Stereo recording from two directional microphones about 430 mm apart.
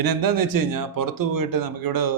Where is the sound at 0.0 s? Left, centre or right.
Right.